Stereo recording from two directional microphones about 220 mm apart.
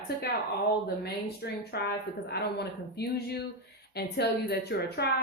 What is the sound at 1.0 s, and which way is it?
Speech, 45° left (ahead or behind).